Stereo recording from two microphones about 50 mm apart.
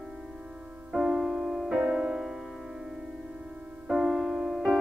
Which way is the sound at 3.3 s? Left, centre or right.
Centre.